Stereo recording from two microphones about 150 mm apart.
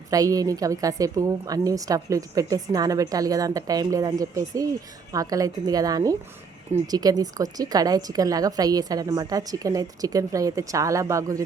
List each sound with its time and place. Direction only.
0.1 s a woman's voice: 25° right (ahead or behind)